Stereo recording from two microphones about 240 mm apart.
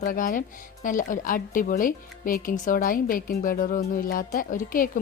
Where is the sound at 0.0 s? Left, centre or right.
Left.